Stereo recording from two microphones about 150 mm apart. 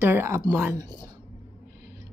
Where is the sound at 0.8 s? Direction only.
30° right (ahead or behind).